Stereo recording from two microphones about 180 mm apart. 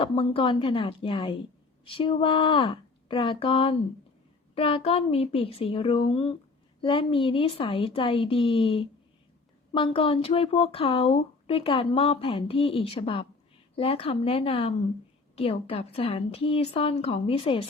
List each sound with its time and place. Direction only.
0.0 s a woman's voice: 30° left (ahead or behind)